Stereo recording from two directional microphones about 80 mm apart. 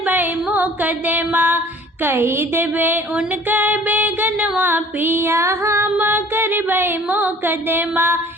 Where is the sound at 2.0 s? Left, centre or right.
Right.